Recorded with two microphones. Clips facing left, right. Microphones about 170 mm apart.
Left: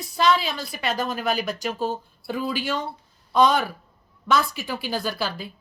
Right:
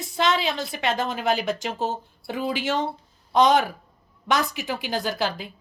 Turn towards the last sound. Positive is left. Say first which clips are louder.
# right 2 dB
turn(degrees=-20)  # may be behind; listen again after turning